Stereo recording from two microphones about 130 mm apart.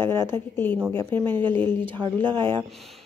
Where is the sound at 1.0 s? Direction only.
15° left (ahead or behind).